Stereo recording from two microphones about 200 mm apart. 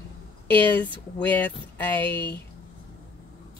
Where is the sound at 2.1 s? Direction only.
55° left (ahead or behind).